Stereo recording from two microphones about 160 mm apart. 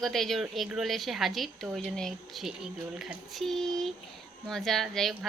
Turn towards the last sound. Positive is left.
turn(degrees=0)  # may be behind; listen again after turning